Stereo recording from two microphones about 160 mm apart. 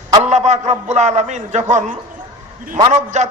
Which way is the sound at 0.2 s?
45° right (ahead or behind).